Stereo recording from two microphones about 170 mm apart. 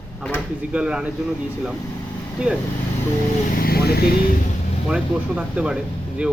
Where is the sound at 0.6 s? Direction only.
5° right (ahead or behind).